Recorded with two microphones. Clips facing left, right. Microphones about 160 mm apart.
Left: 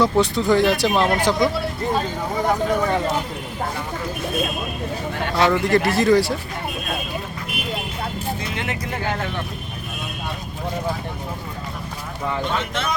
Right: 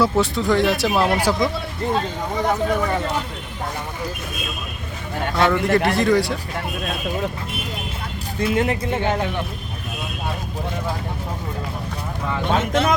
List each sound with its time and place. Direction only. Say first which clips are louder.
0.0 s speech: left 1 dB; centre (ahead or behind)
5.4 s speech: even; centre (ahead or behind)
8.5 s speech: right 6 dB; 35° right (ahead or behind)
12.5 s speech: right 5 dB; 45° right (ahead or behind)